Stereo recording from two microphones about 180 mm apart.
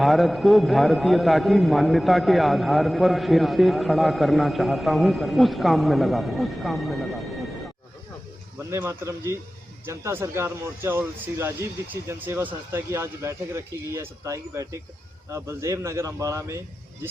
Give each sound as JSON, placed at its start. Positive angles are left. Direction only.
{"t": 0.0, "sound": "a man's voice", "side_deg": 0}
{"t": 8.5, "sound": "speech", "side_deg": -15}